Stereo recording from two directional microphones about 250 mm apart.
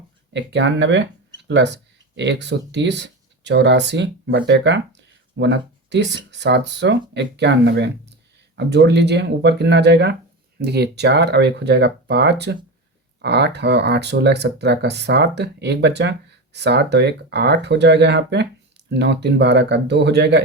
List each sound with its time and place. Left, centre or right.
0.3 s speech: right